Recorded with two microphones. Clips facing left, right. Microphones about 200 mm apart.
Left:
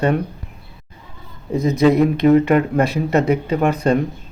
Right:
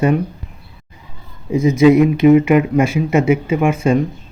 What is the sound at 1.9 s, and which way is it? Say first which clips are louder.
Speech: right 4 dB; 35° left (ahead or behind).